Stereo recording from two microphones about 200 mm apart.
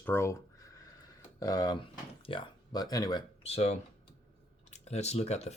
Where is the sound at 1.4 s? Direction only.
20° left (ahead or behind).